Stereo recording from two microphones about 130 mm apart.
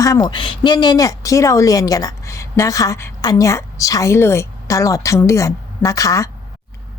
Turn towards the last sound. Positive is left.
turn(degrees=25)  # may be behind; listen again after turning